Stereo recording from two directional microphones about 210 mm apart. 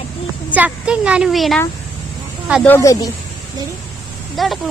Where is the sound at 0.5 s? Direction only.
5° right (ahead or behind).